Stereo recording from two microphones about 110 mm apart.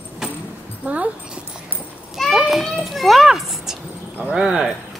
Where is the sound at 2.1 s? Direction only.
Centre (ahead or behind).